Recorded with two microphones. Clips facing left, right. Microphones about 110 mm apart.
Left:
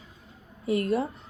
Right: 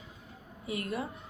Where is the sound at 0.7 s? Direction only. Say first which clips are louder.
Left 10 dB; 30° left (ahead or behind).